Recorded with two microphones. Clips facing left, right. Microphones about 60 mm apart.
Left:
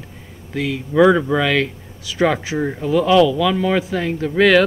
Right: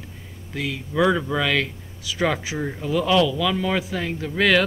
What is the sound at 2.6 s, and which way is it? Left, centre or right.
Speech, centre.